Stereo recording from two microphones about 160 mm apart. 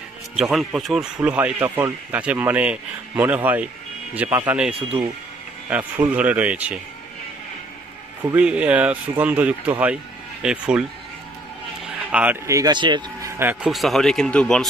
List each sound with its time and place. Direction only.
0.4 s speech: 5° right (ahead or behind)
8.4 s speech: 10° right (ahead or behind)
12.1 s speech: 10° right (ahead or behind)
12.4 s speech: 20° right (ahead or behind)
13.4 s speech: 10° right (ahead or behind)
13.7 s speech: centre (ahead or behind)